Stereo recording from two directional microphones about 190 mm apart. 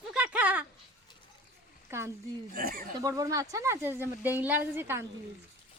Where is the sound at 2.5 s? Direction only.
50° right (ahead or behind).